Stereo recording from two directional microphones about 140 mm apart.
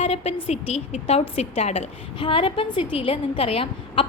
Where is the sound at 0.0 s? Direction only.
50° left (ahead or behind).